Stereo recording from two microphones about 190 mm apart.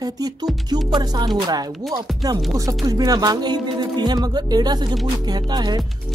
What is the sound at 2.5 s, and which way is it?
Speech, 15° right (ahead or behind).